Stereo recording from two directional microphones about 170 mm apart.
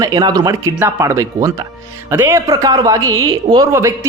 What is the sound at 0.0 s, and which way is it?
Speech, 25° right (ahead or behind).